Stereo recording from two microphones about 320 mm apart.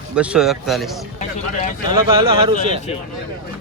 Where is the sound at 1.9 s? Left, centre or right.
Centre.